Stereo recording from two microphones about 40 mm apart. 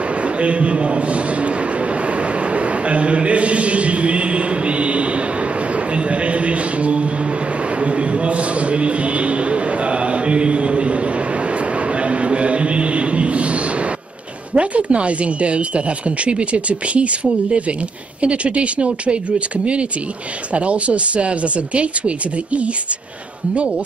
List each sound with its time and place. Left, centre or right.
0.2 s a man's voice: right
2.5 s a man's voice: right
12.0 s a sound: right
14.5 s a man's voice: right